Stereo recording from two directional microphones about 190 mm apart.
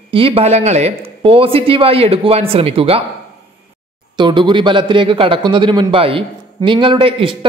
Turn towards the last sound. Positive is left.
turn(degrees=-30)  # may be behind; listen again after turning